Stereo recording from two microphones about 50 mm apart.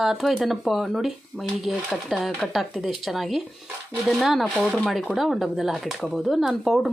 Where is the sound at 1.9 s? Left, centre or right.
Centre.